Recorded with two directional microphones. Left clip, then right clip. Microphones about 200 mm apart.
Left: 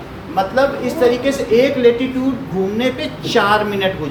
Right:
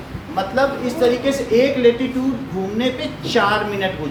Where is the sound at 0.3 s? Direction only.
10° left (ahead or behind).